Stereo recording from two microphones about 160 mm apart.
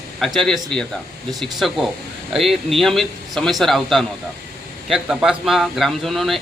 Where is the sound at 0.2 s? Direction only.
Centre (ahead or behind).